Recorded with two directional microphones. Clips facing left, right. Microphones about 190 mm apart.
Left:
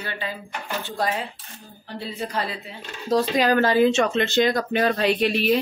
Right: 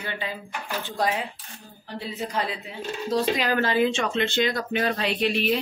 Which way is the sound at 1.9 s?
15° right (ahead or behind).